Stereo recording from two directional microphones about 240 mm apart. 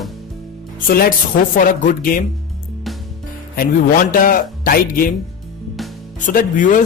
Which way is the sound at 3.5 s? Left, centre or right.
Left.